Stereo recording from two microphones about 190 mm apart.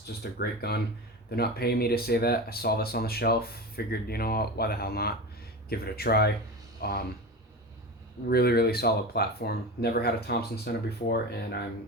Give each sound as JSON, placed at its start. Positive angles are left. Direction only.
{"t": 0.1, "sound": "speech", "side_deg": 55}
{"t": 8.3, "sound": "speech", "side_deg": 55}